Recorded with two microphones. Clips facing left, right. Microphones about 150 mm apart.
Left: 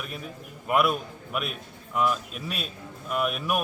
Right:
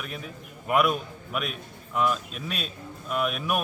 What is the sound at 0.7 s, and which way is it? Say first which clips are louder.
A man's voice: even; centre (ahead or behind).